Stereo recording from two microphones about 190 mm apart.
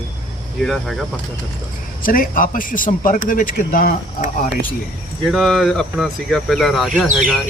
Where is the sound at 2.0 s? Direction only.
50° left (ahead or behind).